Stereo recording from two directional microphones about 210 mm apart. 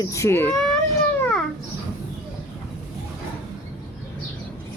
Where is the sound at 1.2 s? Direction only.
5° left (ahead or behind).